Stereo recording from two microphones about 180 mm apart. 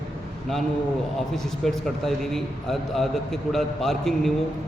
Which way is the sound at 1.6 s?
Centre (ahead or behind).